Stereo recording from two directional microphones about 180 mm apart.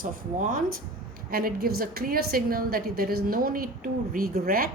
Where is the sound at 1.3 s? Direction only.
55° right (ahead or behind).